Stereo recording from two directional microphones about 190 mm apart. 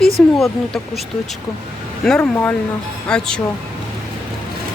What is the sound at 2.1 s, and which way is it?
Speech, 5° left (ahead or behind).